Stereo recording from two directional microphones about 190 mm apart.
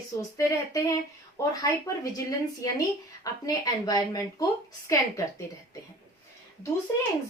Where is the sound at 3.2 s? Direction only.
20° left (ahead or behind).